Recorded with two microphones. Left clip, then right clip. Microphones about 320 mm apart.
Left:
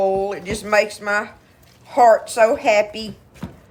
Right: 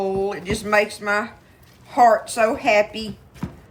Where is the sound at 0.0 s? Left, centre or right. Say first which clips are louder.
Left 4 dB; centre.